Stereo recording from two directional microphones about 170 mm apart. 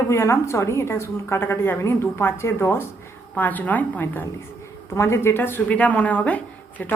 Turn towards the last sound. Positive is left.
turn(degrees=10)  # may be behind; listen again after turning